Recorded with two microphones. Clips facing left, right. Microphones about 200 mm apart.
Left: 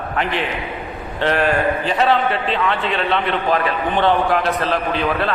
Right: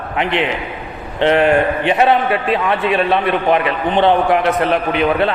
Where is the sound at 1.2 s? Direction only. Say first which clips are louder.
Right 5 dB; 20° right (ahead or behind).